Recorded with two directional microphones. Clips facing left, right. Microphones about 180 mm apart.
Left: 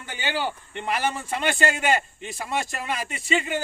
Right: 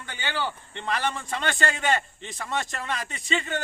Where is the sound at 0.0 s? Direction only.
15° left (ahead or behind).